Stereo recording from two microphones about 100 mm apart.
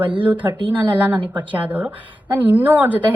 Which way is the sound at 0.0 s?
55° right (ahead or behind).